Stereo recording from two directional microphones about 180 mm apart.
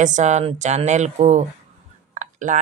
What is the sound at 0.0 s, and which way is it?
Speech, 40° right (ahead or behind).